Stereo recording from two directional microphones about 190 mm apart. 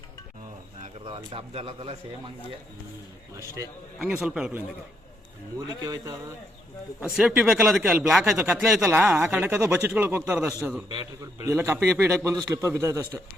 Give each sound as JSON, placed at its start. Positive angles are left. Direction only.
{"t": 0.8, "sound": "speech", "side_deg": -30}
{"t": 3.9, "sound": "speech", "side_deg": -5}
{"t": 5.5, "sound": "a man's voice", "side_deg": -20}
{"t": 7.0, "sound": "a man's voice", "side_deg": -5}